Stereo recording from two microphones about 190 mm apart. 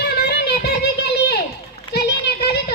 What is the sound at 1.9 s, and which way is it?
Children playing, 60° left (ahead or behind).